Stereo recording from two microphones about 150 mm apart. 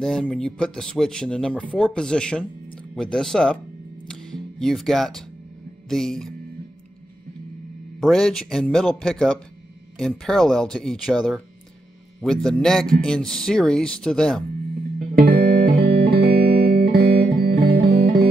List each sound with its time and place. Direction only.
0.0 s speech: 5° left (ahead or behind)
4.1 s music: 5° left (ahead or behind)
5.9 s speech: 5° left (ahead or behind)
8.0 s speech: centre (ahead or behind)
15.0 s music: 75° right (ahead or behind); by 18.3 s 90° right